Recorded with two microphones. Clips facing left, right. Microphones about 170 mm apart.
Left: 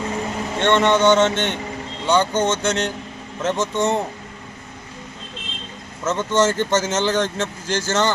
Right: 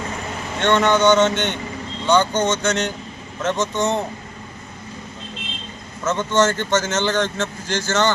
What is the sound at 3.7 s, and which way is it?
Speech, 30° left (ahead or behind).